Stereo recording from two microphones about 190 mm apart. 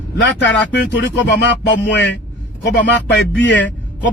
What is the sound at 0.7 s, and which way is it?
Speech, 65° left (ahead or behind).